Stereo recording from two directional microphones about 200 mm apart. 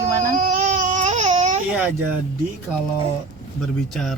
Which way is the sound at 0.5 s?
40° right (ahead or behind).